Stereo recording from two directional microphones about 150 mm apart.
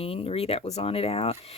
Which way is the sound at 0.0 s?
40° left (ahead or behind).